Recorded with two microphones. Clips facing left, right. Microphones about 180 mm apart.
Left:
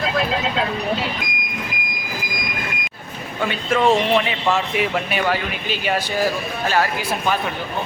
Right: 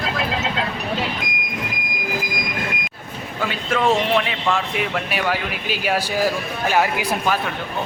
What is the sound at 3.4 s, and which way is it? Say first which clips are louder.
Speech: left 2 dB; centre (ahead or behind).